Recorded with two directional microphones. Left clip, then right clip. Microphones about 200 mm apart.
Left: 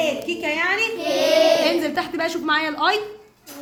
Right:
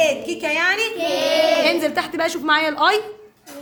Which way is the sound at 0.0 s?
25° right (ahead or behind).